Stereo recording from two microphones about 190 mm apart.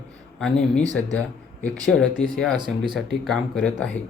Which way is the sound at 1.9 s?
5° left (ahead or behind).